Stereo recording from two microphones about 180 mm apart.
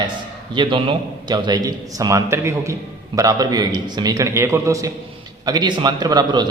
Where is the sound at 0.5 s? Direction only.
30° right (ahead or behind).